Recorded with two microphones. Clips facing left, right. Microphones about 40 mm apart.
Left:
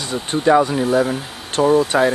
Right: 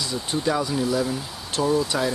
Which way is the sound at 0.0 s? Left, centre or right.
Left.